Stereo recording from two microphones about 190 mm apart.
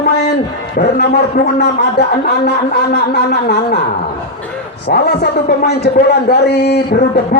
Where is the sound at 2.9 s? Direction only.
60° left (ahead or behind).